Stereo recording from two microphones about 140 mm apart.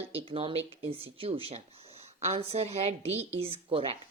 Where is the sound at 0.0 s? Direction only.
45° right (ahead or behind).